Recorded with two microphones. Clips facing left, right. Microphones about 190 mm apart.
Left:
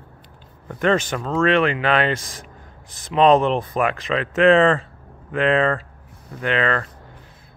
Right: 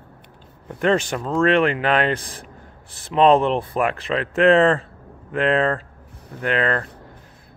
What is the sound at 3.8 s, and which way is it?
Speech, 35° right (ahead or behind).